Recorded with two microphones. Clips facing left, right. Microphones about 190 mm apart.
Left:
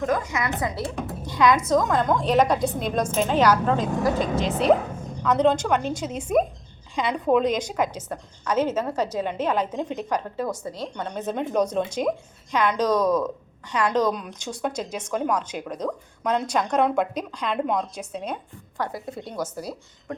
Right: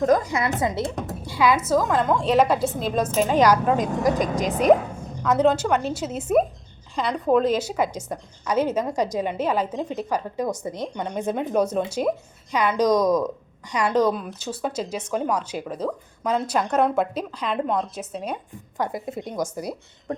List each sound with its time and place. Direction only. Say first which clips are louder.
0.0 s a woman's voice: right 5 dB; 35° right (ahead or behind)
1.2 s a woman's voice: left 1 dB; 10° right (ahead or behind)
18.8 s speech: right 3 dB; 20° right (ahead or behind)